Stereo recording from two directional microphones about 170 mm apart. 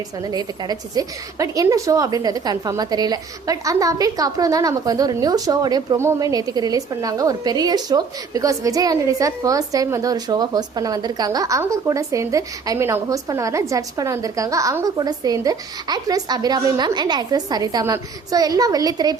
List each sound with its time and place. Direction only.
0.2 s a woman's voice: 25° right (ahead or behind)